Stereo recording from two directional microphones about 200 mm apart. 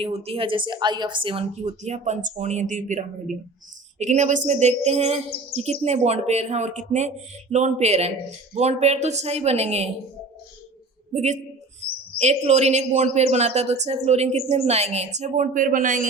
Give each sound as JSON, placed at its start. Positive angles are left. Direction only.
{"t": 0.0, "sound": "a woman's voice", "side_deg": -30}
{"t": 11.1, "sound": "a man's voice", "side_deg": -35}